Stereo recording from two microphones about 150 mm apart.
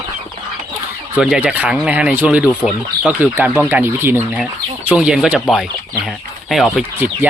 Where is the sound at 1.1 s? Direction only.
5° right (ahead or behind).